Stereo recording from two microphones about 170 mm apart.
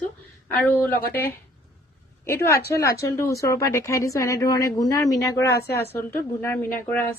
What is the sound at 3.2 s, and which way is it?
A woman's voice, 20° left (ahead or behind).